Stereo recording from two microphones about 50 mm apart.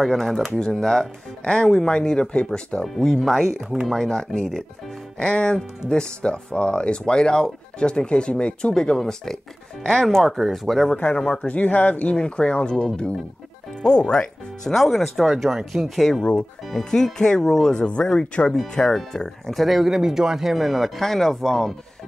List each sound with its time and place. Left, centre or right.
0.0 s speech: centre
3.2 s speech: centre
4.0 s speech: centre
8.7 s speech: centre
11.1 s speech: centre
11.4 s speech: left; by 16.2 s centre
16.2 s speech: centre
17.7 s speech: left
18.6 s speech: centre